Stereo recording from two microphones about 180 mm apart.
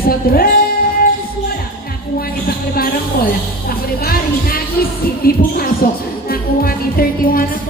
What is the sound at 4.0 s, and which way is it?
Music, 55° left (ahead or behind).